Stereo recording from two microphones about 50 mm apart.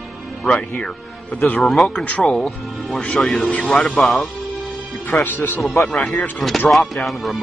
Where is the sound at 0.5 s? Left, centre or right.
Left.